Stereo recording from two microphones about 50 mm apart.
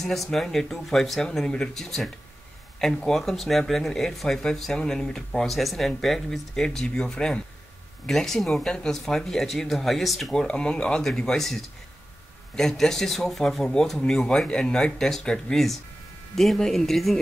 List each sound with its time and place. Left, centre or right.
0.0 s speech: centre
10.3 s speech: centre